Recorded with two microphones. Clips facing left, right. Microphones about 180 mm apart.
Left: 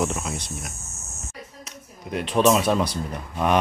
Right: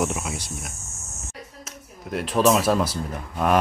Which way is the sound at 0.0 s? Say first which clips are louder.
Even; 5° right (ahead or behind).